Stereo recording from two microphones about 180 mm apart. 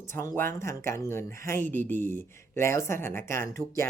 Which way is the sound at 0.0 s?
15° left (ahead or behind).